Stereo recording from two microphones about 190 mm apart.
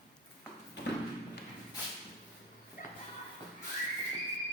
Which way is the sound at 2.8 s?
50° left (ahead or behind).